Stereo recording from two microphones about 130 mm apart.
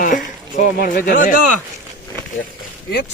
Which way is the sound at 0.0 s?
90° left.